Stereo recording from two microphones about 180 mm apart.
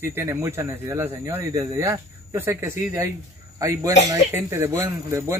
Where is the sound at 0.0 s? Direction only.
15° right (ahead or behind).